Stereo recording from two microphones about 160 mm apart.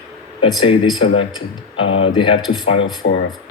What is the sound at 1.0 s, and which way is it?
A man's voice, 40° left (ahead or behind).